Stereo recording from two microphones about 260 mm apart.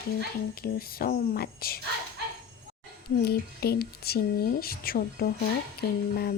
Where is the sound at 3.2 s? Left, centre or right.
Left.